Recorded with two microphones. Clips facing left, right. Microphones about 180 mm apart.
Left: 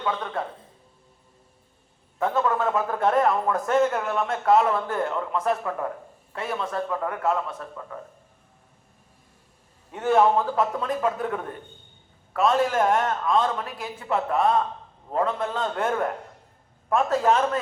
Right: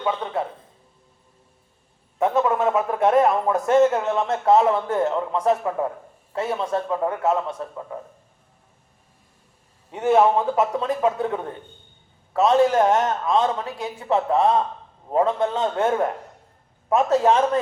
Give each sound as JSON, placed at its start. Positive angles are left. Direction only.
{"t": 0.0, "sound": "a man's voice", "side_deg": -20}
{"t": 2.1, "sound": "a man's voice", "side_deg": -20}
{"t": 9.9, "sound": "a man's voice", "side_deg": -20}